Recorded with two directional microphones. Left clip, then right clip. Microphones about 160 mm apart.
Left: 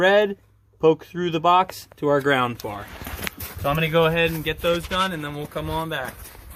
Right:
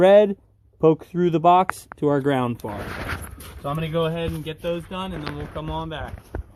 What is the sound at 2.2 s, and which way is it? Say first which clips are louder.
Speech: left 2 dB; 45° right (ahead or behind).